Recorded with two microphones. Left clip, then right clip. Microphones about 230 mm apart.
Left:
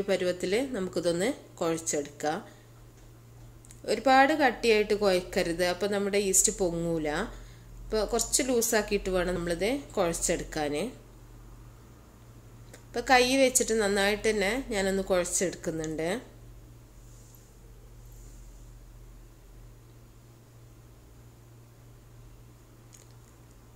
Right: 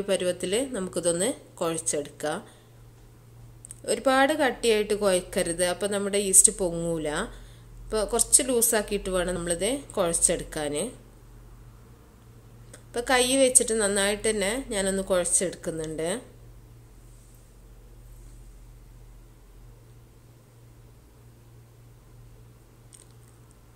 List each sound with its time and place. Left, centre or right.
0.0 s a woman's voice: centre
3.8 s a woman's voice: centre
12.7 s a woman's voice: centre